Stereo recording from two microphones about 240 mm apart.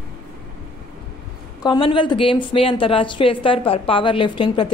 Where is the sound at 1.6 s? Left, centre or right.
Centre.